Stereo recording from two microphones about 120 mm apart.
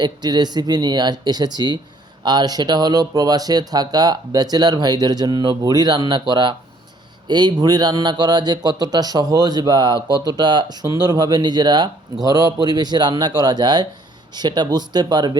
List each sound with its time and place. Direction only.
0.0 s speech: 35° right (ahead or behind)